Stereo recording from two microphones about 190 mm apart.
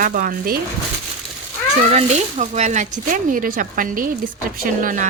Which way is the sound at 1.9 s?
35° right (ahead or behind).